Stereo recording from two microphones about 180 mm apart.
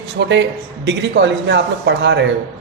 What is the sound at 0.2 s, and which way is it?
A man's voice, 75° right (ahead or behind).